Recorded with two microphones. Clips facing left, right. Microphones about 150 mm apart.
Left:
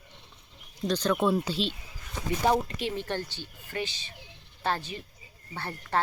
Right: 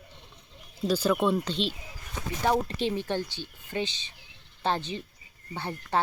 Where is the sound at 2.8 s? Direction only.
15° right (ahead or behind).